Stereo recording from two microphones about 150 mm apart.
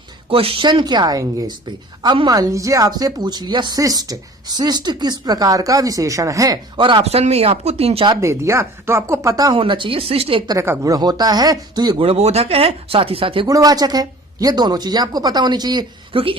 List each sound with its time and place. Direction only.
0.3 s a woman's voice: 35° right (ahead or behind)
8.2 s a woman's voice: 20° right (ahead or behind)
9.6 s speech: 35° right (ahead or behind)
13.5 s a woman's voice: 25° right (ahead or behind)